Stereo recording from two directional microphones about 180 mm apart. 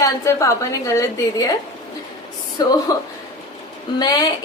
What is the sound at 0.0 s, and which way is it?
A woman's voice, 15° left (ahead or behind).